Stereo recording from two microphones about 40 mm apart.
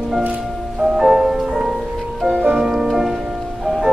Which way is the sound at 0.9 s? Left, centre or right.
Centre.